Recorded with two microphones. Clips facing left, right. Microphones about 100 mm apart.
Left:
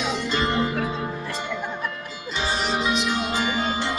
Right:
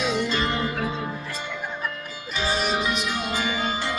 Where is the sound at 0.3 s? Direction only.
25° left (ahead or behind).